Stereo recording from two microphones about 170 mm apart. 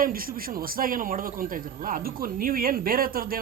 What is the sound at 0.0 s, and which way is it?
A man's voice, 60° right (ahead or behind).